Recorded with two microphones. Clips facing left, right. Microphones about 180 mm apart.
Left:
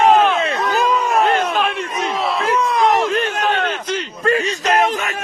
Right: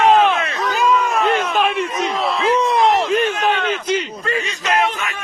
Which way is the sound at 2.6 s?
25° right (ahead or behind).